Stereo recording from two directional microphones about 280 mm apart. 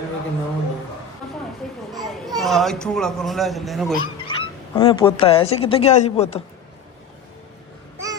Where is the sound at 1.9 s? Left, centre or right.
Centre.